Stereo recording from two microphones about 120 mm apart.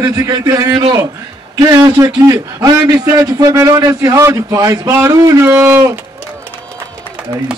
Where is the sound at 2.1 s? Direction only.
30° right (ahead or behind).